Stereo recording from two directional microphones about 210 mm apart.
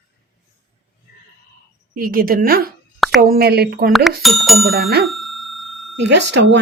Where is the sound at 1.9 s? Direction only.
45° right (ahead or behind).